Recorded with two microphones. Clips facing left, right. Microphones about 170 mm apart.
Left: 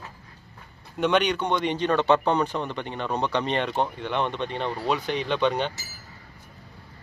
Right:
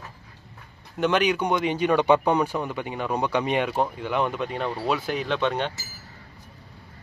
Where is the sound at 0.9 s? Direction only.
Centre (ahead or behind).